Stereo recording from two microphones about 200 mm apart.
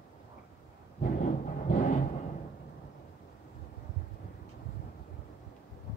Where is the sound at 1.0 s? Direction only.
40° left (ahead or behind).